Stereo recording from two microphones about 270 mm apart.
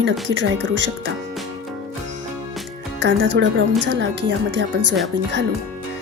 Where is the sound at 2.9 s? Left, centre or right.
Right.